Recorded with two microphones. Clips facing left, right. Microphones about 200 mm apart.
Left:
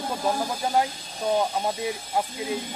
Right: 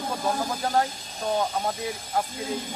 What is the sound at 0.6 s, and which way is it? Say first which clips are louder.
Speech: left 1 dB; 10° left (ahead or behind).